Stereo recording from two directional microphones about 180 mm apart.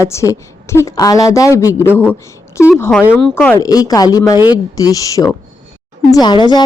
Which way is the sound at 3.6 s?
20° left (ahead or behind).